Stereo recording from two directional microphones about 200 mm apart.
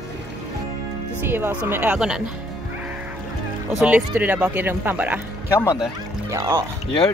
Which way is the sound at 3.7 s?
5° right (ahead or behind).